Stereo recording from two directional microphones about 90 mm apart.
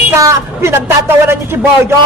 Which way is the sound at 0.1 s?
35° right (ahead or behind).